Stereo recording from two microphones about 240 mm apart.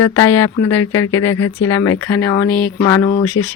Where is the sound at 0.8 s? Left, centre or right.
Left.